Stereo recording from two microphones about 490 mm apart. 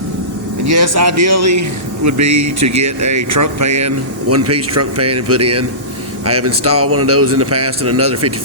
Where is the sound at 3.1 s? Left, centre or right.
Right.